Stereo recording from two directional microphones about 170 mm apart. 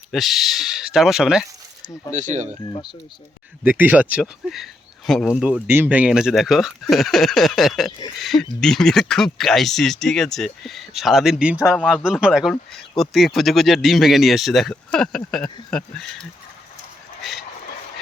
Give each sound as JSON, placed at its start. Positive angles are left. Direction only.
{"t": 0.1, "sound": "speech", "side_deg": 0}
{"t": 2.1, "sound": "speech", "side_deg": -45}
{"t": 3.6, "sound": "speech", "side_deg": -10}
{"t": 17.2, "sound": "speech", "side_deg": 0}